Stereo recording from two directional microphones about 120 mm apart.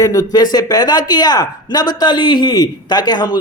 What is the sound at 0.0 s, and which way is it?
Speech, 30° left (ahead or behind).